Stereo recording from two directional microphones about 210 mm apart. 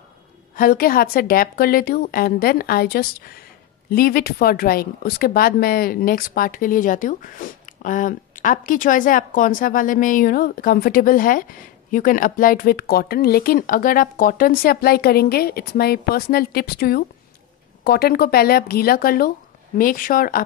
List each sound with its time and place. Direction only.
0.6 s speech: 45° left (ahead or behind)